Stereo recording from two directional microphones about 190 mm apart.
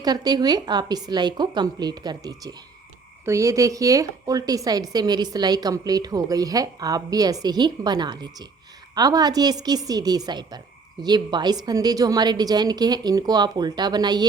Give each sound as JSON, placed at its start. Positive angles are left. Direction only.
{"t": 0.0, "sound": "a woman's voice", "side_deg": -20}